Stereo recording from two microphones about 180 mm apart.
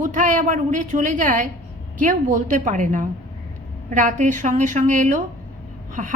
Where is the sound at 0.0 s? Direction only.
45° right (ahead or behind).